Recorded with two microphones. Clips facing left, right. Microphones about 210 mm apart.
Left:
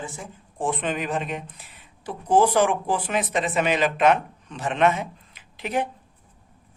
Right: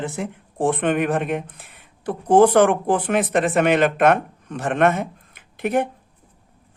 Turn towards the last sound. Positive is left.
turn(degrees=-55)  # may be behind; listen again after turning